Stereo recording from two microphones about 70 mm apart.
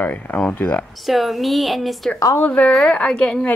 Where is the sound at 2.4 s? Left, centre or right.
Left.